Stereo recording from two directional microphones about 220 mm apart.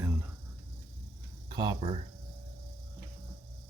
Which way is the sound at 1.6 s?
20° right (ahead or behind).